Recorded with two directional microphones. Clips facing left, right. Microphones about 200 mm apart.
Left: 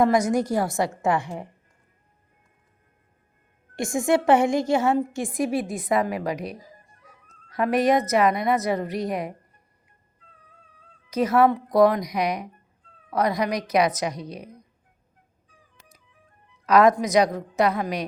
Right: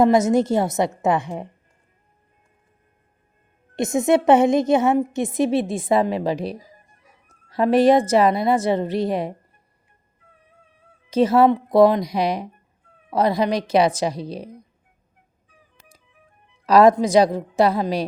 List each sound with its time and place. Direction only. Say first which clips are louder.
0.0 s a woman's voice: right 4 dB; 25° right (ahead or behind)
3.8 s a woman's voice: right 4 dB; 20° right (ahead or behind)
11.1 s a woman's voice: right 4 dB; 30° right (ahead or behind)
16.6 s a woman's voice: right 4 dB; 30° right (ahead or behind)